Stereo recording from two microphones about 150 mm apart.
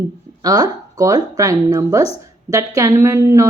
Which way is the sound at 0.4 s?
25° right (ahead or behind).